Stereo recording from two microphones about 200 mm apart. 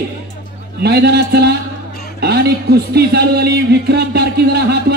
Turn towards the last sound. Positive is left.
turn(degrees=-55)  # may be behind; listen again after turning